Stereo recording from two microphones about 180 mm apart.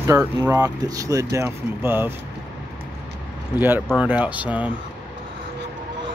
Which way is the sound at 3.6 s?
10° right (ahead or behind).